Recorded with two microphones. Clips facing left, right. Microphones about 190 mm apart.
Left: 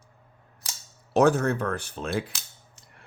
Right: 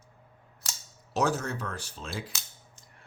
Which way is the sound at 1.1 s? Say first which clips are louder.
Left 8 dB; 55° left (ahead or behind).